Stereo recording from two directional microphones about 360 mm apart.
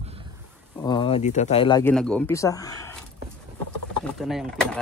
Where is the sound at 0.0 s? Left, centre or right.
Centre.